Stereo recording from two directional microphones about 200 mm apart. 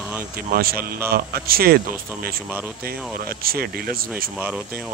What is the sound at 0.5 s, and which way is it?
Speech, 50° right (ahead or behind).